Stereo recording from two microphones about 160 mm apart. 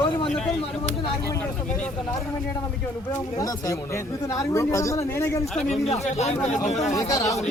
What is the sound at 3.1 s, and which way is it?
Speech, 20° left (ahead or behind).